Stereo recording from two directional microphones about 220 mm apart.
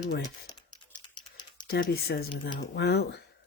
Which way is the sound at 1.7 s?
45° left (ahead or behind).